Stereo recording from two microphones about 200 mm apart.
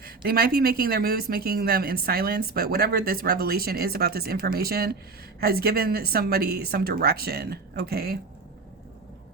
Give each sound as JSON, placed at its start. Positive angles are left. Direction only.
{"t": 0.0, "sound": "speech", "side_deg": -50}